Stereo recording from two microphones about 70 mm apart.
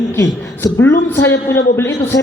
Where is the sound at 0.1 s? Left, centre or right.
Left.